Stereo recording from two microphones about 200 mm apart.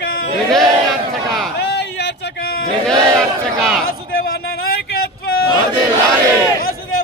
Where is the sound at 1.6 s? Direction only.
55° left (ahead or behind).